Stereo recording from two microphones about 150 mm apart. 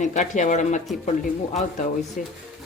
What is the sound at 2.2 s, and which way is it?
Speech, 60° left (ahead or behind).